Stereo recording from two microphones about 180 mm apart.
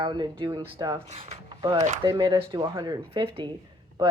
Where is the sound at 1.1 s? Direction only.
40° right (ahead or behind).